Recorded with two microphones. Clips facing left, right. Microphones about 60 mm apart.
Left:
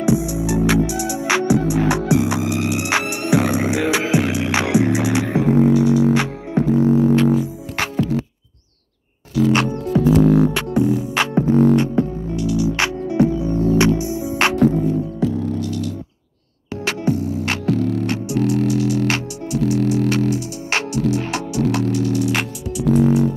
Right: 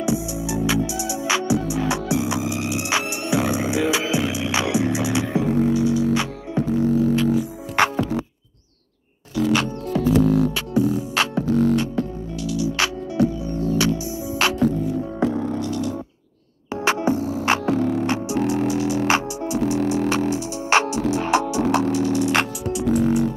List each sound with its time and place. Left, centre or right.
0.0 s music: left
6.9 s music: left
7.3 s music: centre
9.8 s music: centre
10.1 s music: left
11.1 s music: left
14.4 s music: left
16.8 s music: centre
18.0 s music: centre